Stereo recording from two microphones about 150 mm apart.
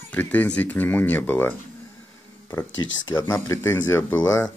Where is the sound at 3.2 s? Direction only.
20° left (ahead or behind).